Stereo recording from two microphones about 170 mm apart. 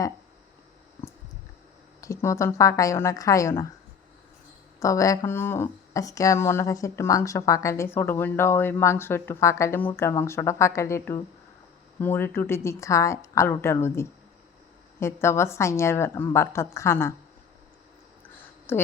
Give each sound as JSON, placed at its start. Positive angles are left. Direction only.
{"t": 2.0, "sound": "speech", "side_deg": 15}
{"t": 4.8, "sound": "speech", "side_deg": 20}
{"t": 18.7, "sound": "speech", "side_deg": 15}